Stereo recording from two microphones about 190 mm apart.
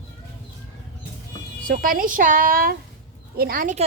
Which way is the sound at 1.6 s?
45° right (ahead or behind).